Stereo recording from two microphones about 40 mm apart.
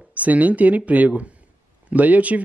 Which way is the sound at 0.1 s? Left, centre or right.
Right.